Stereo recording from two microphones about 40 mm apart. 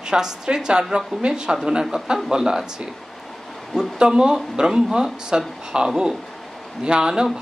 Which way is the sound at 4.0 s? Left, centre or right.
Centre.